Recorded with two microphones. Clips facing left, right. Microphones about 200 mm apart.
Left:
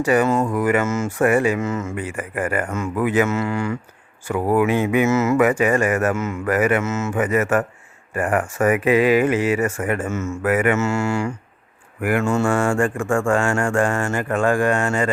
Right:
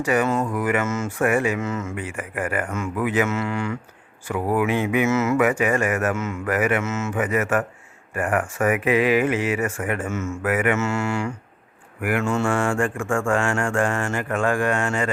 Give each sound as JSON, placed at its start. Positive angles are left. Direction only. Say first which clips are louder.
{"t": 0.0, "sound": "speech", "louder": "left 4 dB", "side_deg": 35}